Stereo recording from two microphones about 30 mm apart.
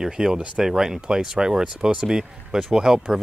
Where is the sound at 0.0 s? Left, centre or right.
Right.